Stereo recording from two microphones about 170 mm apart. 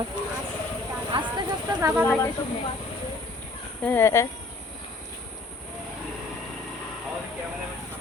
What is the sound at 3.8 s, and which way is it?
Speech, 15° left (ahead or behind).